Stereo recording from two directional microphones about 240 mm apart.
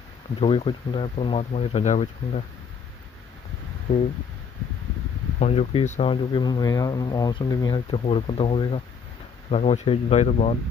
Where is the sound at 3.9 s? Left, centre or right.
Left.